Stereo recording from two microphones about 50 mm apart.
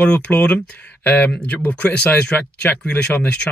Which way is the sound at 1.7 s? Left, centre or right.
Left.